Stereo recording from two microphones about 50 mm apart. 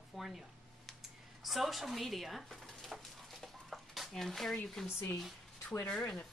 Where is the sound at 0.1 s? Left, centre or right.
Centre.